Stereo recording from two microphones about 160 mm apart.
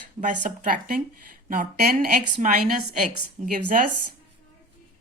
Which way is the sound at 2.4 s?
55° right (ahead or behind).